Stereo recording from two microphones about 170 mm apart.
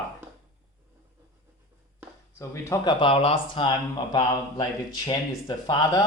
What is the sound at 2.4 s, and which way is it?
Speech, 20° left (ahead or behind).